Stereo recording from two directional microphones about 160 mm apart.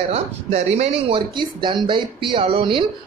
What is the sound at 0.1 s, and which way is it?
Speech, 40° right (ahead or behind).